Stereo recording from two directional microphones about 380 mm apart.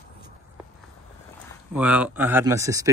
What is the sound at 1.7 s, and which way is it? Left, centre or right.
Speech, centre.